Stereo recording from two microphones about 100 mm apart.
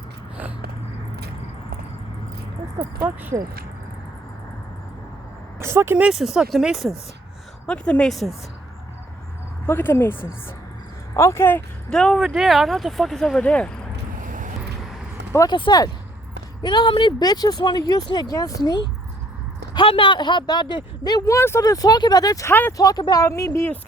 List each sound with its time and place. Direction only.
3.3 s speech: 35° right (ahead or behind)
5.5 s speech: 25° right (ahead or behind)
6.1 s speech: 5° right (ahead or behind)
7.7 s speech: 10° left (ahead or behind)
9.6 s speech: 25° left (ahead or behind)
11.9 s speech: 5° left (ahead or behind)
12.2 s speech: 5° right (ahead or behind); by 13.7 s 10° left (ahead or behind)
15.4 s speech: 50° left (ahead or behind); by 18.7 s 35° left (ahead or behind)
19.7 s speech: 60° left (ahead or behind); by 22.4 s 40° left (ahead or behind)
22.4 s speech: 20° left (ahead or behind)
22.8 s speech: 40° left (ahead or behind)
23.2 s speech: 30° left (ahead or behind)